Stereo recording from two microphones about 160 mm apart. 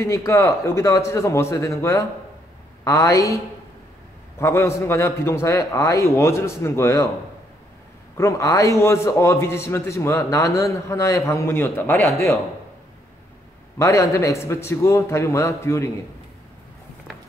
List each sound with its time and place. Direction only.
0.0 s a man's voice: 20° left (ahead or behind)
4.4 s a man's voice: 15° left (ahead or behind)
8.2 s a man's voice: 20° left (ahead or behind)
13.7 s a man's voice: 20° left (ahead or behind)